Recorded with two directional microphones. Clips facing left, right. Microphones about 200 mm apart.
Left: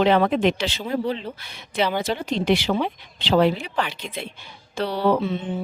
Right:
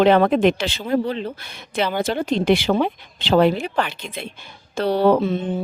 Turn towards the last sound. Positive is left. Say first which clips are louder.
# right 5 dB
turn(degrees=-45)  # may be behind; listen again after turning